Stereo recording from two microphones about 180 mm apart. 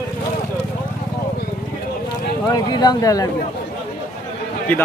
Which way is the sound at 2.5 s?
25° left (ahead or behind).